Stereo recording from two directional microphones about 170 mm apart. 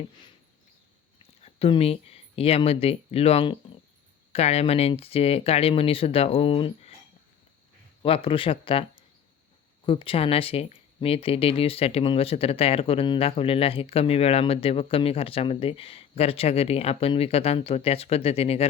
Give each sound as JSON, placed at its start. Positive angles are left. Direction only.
{"t": 1.4, "sound": "speech", "side_deg": 35}
{"t": 8.0, "sound": "speech", "side_deg": 35}